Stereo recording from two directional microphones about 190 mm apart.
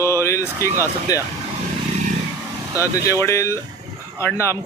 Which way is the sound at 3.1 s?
15° left (ahead or behind).